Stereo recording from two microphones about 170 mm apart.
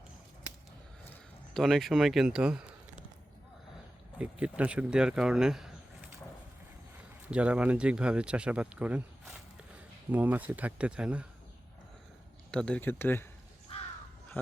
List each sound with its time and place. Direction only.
1.5 s speech: centre (ahead or behind)
4.2 s speech: 5° right (ahead or behind)
7.3 s speech: 5° right (ahead or behind)
12.5 s speech: 5° left (ahead or behind)
13.7 s crow: 35° left (ahead or behind)